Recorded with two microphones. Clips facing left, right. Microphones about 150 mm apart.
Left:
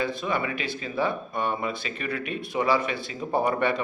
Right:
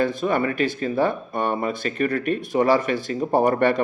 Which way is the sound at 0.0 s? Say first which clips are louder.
Right 6 dB; 50° right (ahead or behind).